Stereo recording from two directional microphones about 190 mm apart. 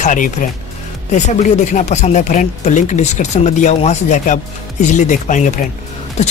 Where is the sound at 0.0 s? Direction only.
40° left (ahead or behind).